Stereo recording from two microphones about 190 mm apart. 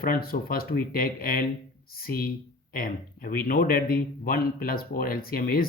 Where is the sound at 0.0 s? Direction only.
50° left (ahead or behind).